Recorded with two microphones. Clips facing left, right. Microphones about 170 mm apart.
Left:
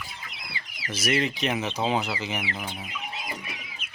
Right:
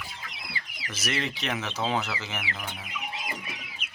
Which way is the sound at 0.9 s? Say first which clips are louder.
Left 6 dB; 10° left (ahead or behind).